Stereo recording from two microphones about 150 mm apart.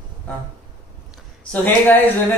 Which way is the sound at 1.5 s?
10° left (ahead or behind).